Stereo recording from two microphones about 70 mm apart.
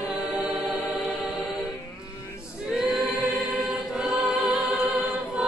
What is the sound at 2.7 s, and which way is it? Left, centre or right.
Choir, centre.